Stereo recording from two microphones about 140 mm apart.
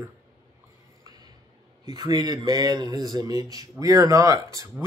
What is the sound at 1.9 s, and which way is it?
Speech, 30° right (ahead or behind).